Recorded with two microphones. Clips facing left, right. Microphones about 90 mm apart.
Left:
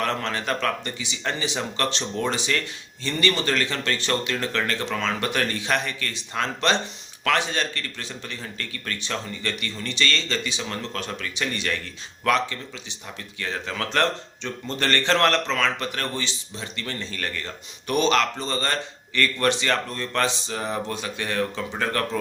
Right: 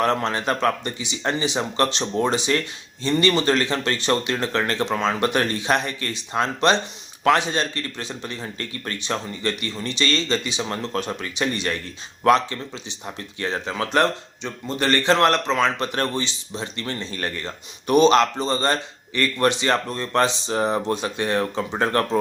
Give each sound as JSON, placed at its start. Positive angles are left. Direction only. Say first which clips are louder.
{"t": 0.0, "sound": "speech", "louder": "right 5 dB", "side_deg": -20}